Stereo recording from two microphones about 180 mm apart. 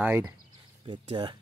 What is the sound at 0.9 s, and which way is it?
Speech, 25° right (ahead or behind).